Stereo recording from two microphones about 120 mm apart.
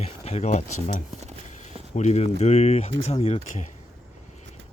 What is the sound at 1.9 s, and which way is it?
Speech, 70° left (ahead or behind).